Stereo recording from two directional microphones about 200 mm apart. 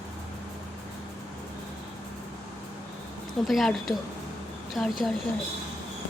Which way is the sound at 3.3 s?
Centre (ahead or behind).